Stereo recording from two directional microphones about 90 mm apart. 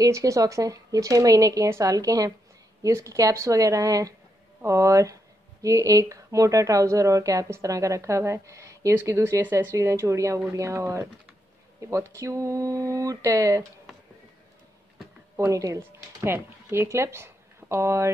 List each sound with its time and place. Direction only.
0.0 s speech: 40° right (ahead or behind)
15.3 s speech: 35° right (ahead or behind)